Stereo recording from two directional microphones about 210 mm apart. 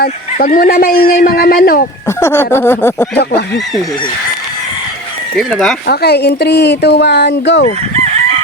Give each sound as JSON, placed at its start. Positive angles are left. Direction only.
{"t": 0.0, "sound": "speech", "side_deg": 45}
{"t": 2.0, "sound": "a sound", "side_deg": 10}
{"t": 5.4, "sound": "speech", "side_deg": 0}
{"t": 5.9, "sound": "speech", "side_deg": 50}